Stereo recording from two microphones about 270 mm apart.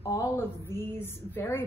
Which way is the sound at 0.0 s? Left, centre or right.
Centre.